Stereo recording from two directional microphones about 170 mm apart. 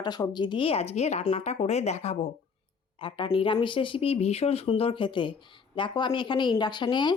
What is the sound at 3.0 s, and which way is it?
Speech, 30° left (ahead or behind).